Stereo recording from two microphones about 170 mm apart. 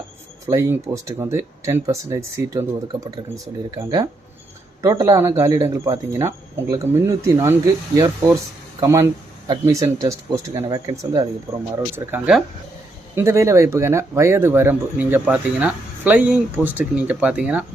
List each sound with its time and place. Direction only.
0.4 s speech: 15° right (ahead or behind)